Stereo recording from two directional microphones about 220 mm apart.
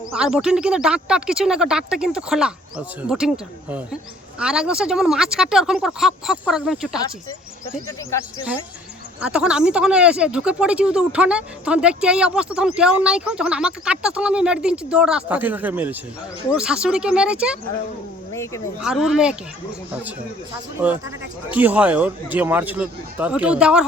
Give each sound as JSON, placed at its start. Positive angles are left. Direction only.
{"t": 0.1, "sound": "speech", "side_deg": -5}
{"t": 9.2, "sound": "speech", "side_deg": -5}
{"t": 18.8, "sound": "speech", "side_deg": -5}
{"t": 20.8, "sound": "speech", "side_deg": -5}